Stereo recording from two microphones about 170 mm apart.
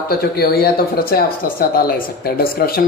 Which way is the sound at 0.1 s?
65° left (ahead or behind).